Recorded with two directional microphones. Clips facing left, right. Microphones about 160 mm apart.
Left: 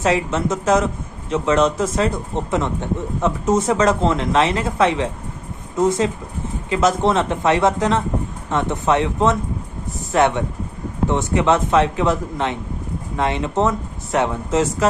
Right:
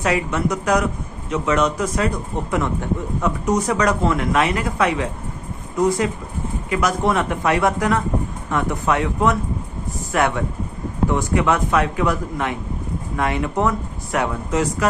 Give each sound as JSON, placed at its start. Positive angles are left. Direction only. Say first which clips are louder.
{"t": 0.0, "sound": "speech", "louder": "left 2 dB", "side_deg": 25}